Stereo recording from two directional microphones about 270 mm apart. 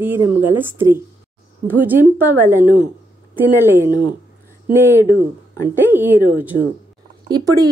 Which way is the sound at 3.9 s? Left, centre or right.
Centre.